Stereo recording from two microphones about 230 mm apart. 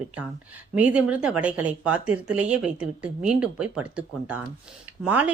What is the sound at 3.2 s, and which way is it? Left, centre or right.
A woman's voice, centre.